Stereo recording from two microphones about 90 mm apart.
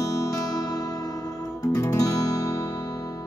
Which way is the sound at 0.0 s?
40° left (ahead or behind).